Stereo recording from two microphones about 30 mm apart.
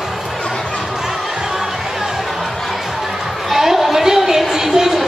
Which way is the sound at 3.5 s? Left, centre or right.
Centre.